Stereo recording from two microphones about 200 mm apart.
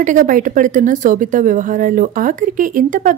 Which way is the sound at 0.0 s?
40° right (ahead or behind).